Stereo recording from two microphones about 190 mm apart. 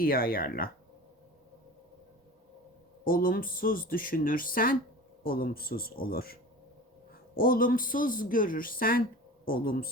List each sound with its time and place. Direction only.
0.0 s a man's voice: 50° left (ahead or behind)
3.0 s a man's voice: 50° left (ahead or behind)